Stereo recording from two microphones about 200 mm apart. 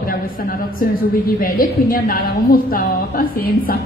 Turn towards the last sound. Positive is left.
turn(degrees=45)  # may be behind; listen again after turning